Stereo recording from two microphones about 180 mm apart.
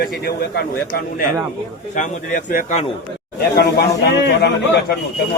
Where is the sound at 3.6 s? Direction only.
70° left (ahead or behind).